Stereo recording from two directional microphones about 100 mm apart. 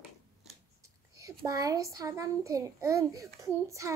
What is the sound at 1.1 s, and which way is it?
A child's voice, 35° right (ahead or behind).